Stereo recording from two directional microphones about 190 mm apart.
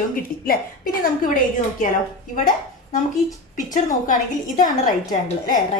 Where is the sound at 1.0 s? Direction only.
45° left (ahead or behind).